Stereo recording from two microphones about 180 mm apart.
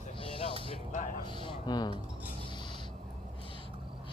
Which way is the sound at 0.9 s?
45° left (ahead or behind).